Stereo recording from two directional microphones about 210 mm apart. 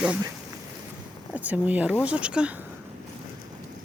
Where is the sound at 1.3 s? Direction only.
5° right (ahead or behind).